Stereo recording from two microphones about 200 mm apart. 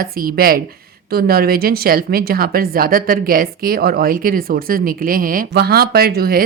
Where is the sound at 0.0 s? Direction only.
45° right (ahead or behind).